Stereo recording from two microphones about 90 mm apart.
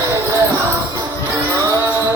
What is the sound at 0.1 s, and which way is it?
Music, 35° right (ahead or behind).